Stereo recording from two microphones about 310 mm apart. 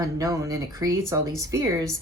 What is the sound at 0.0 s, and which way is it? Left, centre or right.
Speech, centre.